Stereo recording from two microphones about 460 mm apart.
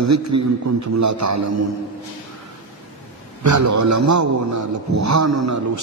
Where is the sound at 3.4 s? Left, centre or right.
Right.